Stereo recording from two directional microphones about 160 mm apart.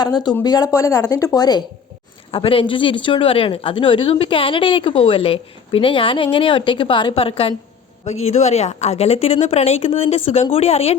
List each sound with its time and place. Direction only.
0.0 s speech: 25° left (ahead or behind)
2.3 s speech: 35° left (ahead or behind)